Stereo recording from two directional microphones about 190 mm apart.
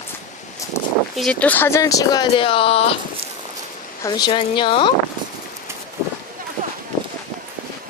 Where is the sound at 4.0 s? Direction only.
20° left (ahead or behind).